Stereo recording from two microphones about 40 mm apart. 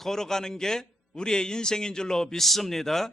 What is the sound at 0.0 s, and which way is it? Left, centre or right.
A man's voice, centre.